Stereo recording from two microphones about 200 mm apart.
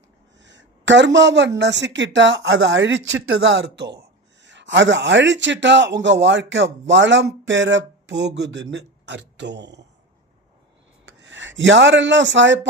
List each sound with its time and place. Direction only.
0.3 s a man's voice: 65° right (ahead or behind)
11.0 s speech: 65° right (ahead or behind)